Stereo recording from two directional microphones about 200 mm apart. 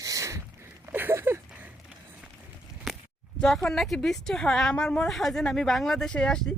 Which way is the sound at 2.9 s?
Centre (ahead or behind).